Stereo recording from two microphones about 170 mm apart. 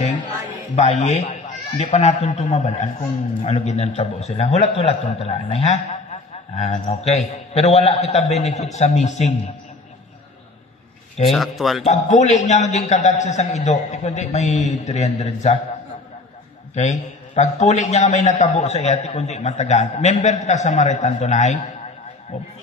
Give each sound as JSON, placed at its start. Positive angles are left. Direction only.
{"t": 0.7, "sound": "a man's voice", "side_deg": 40}
{"t": 11.2, "sound": "speech", "side_deg": 0}
{"t": 11.8, "sound": "a man's voice", "side_deg": 45}
{"t": 16.7, "sound": "a man's voice", "side_deg": 45}